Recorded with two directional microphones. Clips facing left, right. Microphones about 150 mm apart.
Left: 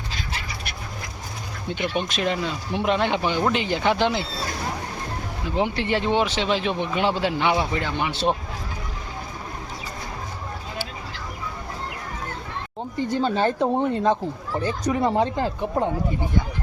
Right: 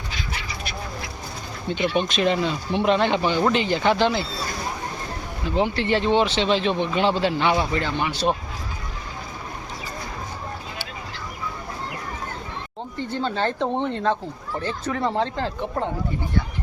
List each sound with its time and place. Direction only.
2.0 s speech: 10° left (ahead or behind)
5.5 s speech: 15° left (ahead or behind)
13.1 s speech: 15° left (ahead or behind)